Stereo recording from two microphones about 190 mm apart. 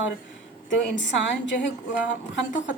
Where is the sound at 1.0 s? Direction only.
70° left (ahead or behind).